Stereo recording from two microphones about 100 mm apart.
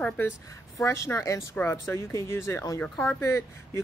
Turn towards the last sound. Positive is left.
turn(degrees=30)  # may be behind; listen again after turning